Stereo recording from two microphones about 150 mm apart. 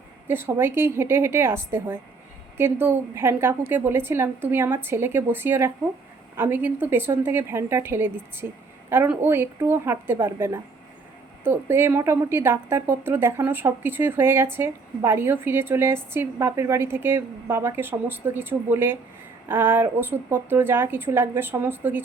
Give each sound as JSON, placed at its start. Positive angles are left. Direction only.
{"t": 0.3, "sound": "a woman's voice", "side_deg": -15}